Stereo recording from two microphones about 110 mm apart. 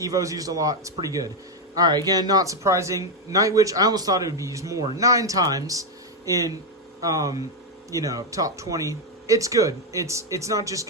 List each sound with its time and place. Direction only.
0.0 s speech: 30° right (ahead or behind)